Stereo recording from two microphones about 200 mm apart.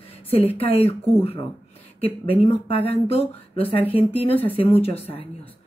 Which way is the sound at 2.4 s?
30° left (ahead or behind).